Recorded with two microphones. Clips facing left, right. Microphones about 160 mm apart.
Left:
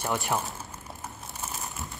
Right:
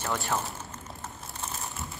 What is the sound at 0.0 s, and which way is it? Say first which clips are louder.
Speech: left 2 dB; 15° left (ahead or behind).